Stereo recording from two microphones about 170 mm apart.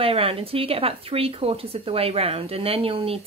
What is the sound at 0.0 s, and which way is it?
Speech, 35° right (ahead or behind).